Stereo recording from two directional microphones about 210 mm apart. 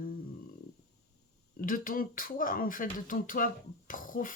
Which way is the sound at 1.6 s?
40° left (ahead or behind).